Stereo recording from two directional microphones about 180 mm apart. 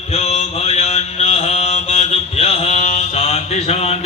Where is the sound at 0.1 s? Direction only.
35° left (ahead or behind).